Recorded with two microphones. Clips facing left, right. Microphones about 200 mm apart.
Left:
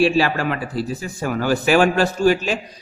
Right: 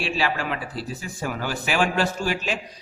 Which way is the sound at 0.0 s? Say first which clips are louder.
Left 9 dB; 45° left (ahead or behind).